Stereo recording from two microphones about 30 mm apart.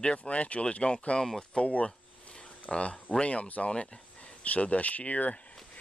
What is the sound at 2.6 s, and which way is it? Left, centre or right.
Speech, left.